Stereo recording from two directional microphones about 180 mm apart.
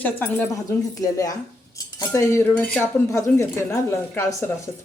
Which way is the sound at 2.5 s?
5° left (ahead or behind).